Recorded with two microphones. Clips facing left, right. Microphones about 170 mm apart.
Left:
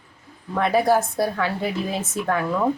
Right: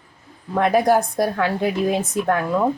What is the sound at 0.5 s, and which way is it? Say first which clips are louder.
A woman's voice: right 2 dB; 15° right (ahead or behind).